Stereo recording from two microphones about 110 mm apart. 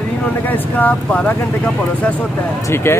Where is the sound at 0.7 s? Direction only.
15° left (ahead or behind).